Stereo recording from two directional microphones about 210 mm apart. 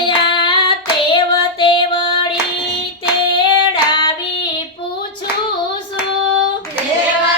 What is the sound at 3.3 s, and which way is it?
Female singing, 20° left (ahead or behind).